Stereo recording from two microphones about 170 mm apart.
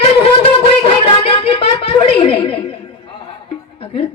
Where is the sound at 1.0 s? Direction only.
35° left (ahead or behind).